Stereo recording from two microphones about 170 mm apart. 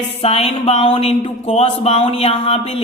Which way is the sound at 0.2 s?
35° left (ahead or behind).